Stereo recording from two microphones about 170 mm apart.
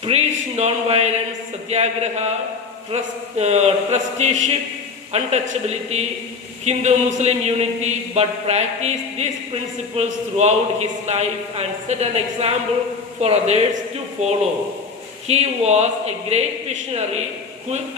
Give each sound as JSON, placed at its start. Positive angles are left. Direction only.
{"t": 0.0, "sound": "speech", "side_deg": -40}
{"t": 15.3, "sound": "speech", "side_deg": -40}